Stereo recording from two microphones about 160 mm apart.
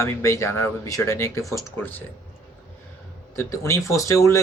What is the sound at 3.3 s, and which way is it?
Speech, 15° left (ahead or behind).